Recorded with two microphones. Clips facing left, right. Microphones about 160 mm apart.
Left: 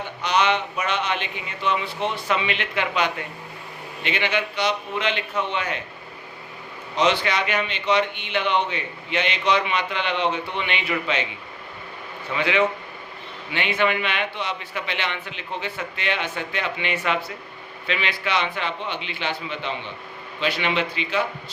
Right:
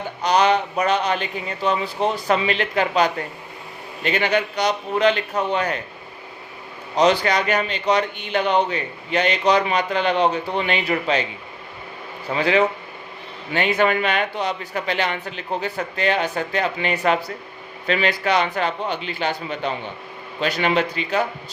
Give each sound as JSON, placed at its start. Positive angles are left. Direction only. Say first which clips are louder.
{"t": 0.2, "sound": "a man's voice", "louder": "right 4 dB", "side_deg": -40}
{"t": 6.9, "sound": "a man's voice", "louder": "right 4 dB", "side_deg": -40}
{"t": 12.3, "sound": "a man's voice", "louder": "right 3 dB", "side_deg": -35}